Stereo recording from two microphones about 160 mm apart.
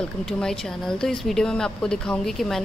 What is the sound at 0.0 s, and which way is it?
A woman's voice, 5° left (ahead or behind).